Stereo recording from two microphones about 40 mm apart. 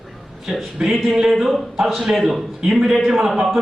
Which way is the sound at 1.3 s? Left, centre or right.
Centre.